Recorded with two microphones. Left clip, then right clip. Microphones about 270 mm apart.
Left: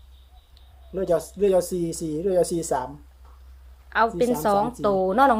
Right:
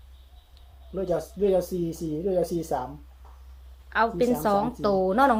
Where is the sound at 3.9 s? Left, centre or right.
Centre.